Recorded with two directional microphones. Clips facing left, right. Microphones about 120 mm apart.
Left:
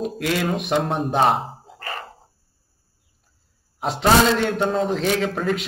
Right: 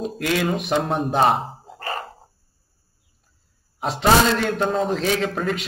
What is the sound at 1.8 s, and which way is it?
Dog, 35° right (ahead or behind).